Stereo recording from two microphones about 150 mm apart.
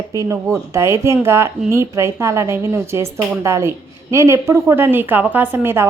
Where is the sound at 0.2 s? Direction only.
20° right (ahead or behind).